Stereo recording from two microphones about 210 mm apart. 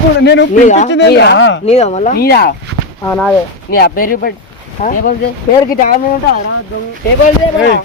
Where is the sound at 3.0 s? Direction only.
10° left (ahead or behind).